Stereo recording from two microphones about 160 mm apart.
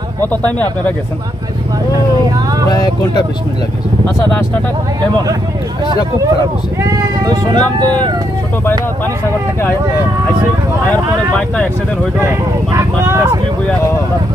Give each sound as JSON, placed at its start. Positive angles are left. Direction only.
{"t": 0.3, "sound": "speech", "side_deg": 10}
{"t": 6.8, "sound": "speech", "side_deg": -25}
{"t": 7.6, "sound": "speech", "side_deg": 10}
{"t": 11.3, "sound": "speech", "side_deg": 10}
{"t": 12.2, "sound": "speech", "side_deg": -15}